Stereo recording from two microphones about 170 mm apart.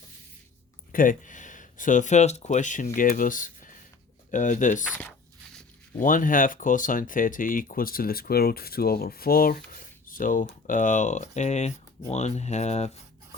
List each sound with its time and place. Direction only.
0.9 s speech: 50° left (ahead or behind)
6.0 s speech: 50° left (ahead or behind)
9.7 s a sound: 55° left (ahead or behind)
10.7 s speech: 50° left (ahead or behind)